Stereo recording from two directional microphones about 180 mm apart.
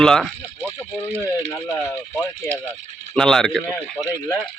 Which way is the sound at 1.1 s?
15° right (ahead or behind).